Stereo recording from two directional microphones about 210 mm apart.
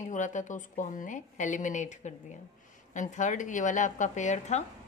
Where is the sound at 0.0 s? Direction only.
35° left (ahead or behind).